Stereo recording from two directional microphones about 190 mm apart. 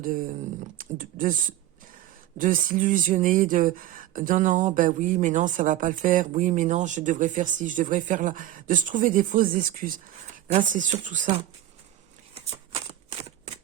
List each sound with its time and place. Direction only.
0.0 s speech: 45° right (ahead or behind)
12.7 s shuffling cards: 30° right (ahead or behind)